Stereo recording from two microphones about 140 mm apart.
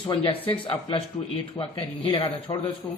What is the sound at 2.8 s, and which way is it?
Speech, 25° left (ahead or behind).